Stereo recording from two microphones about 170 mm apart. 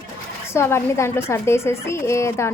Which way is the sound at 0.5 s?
15° left (ahead or behind).